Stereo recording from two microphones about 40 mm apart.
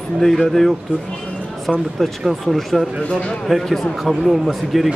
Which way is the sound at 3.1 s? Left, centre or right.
Left.